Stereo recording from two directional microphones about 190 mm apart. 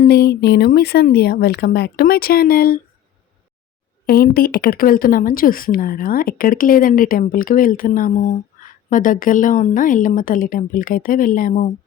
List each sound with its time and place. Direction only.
0.0 s speech: 55° left (ahead or behind)
4.0 s speech: 50° left (ahead or behind)